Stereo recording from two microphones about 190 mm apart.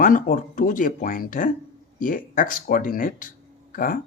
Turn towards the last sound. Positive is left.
turn(degrees=45)  # may be behind; listen again after turning